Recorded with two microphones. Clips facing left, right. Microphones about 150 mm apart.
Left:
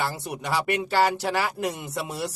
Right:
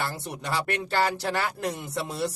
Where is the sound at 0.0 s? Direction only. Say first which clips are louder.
Left 3 dB; 5° left (ahead or behind).